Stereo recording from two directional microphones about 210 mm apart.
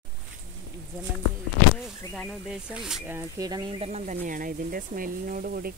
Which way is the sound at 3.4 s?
20° right (ahead or behind).